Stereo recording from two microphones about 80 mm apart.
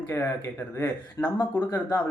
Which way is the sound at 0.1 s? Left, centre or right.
Left.